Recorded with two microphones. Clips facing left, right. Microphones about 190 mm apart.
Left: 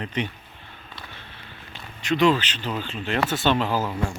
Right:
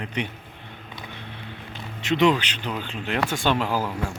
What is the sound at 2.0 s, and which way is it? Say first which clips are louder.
Speech: even; 20° right (ahead or behind).